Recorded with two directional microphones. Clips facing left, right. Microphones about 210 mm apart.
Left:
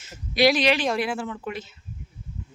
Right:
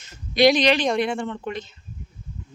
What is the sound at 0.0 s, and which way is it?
Speech, 5° left (ahead or behind).